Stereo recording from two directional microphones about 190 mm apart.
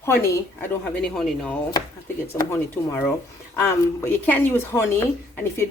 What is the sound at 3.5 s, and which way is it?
Speech, 10° left (ahead or behind).